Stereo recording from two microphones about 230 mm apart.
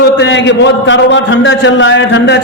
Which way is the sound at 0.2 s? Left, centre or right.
Left.